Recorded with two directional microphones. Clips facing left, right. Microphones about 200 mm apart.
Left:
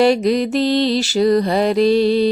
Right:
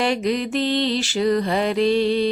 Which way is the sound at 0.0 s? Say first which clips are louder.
Left 7 dB; 35° left (ahead or behind).